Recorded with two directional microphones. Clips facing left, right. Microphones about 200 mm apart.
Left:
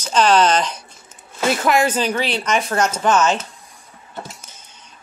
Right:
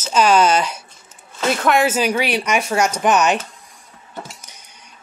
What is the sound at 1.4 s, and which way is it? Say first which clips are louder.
Speech: even; 5° left (ahead or behind).